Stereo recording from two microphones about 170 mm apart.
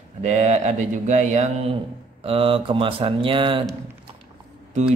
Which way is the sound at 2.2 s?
35° right (ahead or behind).